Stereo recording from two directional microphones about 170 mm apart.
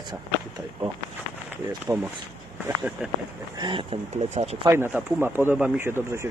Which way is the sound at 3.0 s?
5° right (ahead or behind).